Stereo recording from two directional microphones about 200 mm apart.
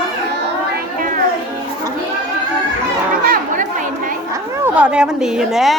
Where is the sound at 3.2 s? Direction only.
45° right (ahead or behind).